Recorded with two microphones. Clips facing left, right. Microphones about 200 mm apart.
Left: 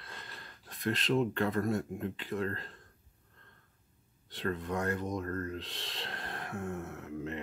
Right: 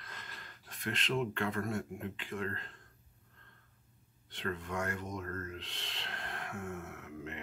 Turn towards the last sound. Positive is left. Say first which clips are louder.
# left 6 dB
turn(degrees=35)  # may be behind; listen again after turning